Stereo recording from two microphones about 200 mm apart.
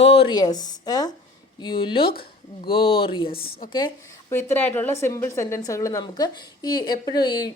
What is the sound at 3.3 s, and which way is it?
Speech, 50° left (ahead or behind).